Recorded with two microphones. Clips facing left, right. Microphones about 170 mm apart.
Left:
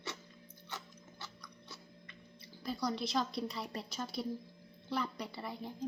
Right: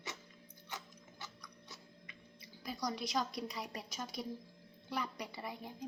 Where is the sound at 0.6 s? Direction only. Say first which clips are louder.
Left 1 dB; 15° right (ahead or behind).